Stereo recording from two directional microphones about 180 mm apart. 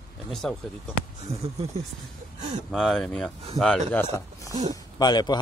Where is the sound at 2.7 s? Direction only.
5° left (ahead or behind).